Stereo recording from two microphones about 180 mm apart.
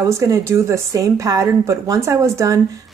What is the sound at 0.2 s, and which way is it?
A woman's voice, 15° right (ahead or behind).